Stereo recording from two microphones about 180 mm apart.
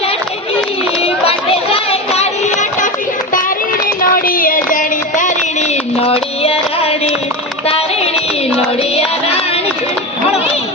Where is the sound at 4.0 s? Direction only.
50° left (ahead or behind).